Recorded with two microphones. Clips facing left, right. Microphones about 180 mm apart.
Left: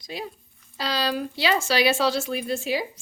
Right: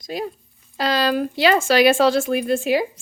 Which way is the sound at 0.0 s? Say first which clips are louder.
Right 7 dB; 45° right (ahead or behind).